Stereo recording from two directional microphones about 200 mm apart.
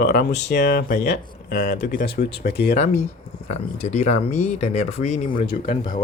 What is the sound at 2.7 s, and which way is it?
Speech, 35° left (ahead or behind).